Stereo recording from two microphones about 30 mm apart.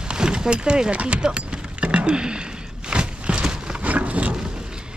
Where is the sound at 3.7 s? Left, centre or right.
Right.